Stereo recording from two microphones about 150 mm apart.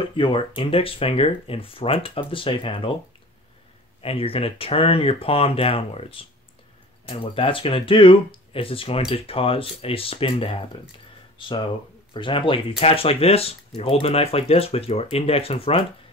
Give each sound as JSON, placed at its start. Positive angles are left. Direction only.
{"t": 0.0, "sound": "speech", "side_deg": 35}
{"t": 4.0, "sound": "speech", "side_deg": 40}